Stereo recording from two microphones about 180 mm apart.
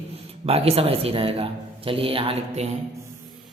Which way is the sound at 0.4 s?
35° right (ahead or behind).